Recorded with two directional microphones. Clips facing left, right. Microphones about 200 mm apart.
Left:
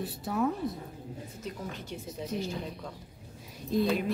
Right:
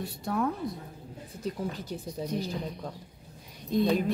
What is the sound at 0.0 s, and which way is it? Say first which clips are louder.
Speech: even; 5° left (ahead or behind).